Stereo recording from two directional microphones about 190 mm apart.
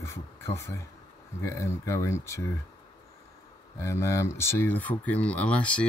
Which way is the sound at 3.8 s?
15° left (ahead or behind).